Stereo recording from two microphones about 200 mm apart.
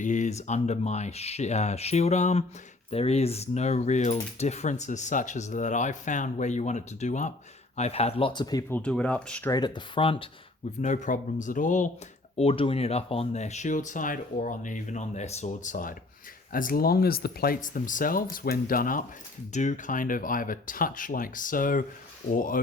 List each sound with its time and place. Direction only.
0.0 s speech: 40° left (ahead or behind); by 8.8 s 20° left (ahead or behind)
8.8 s speech: 5° left (ahead or behind)
9.5 s speech: 20° left (ahead or behind)
10.8 s speech: 35° left (ahead or behind)
12.4 s speech: 30° left (ahead or behind)